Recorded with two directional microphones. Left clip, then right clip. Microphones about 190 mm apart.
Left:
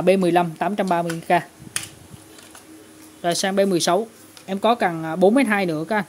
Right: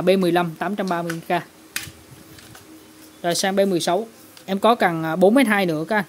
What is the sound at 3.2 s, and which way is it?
Speech, centre (ahead or behind).